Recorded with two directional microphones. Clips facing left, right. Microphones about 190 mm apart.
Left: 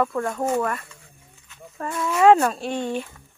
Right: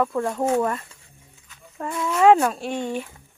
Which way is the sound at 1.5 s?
5° right (ahead or behind).